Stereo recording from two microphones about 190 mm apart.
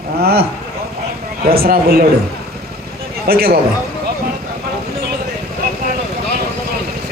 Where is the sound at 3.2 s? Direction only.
55° right (ahead or behind).